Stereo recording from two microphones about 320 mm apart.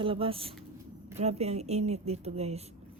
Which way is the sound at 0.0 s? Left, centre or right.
Centre.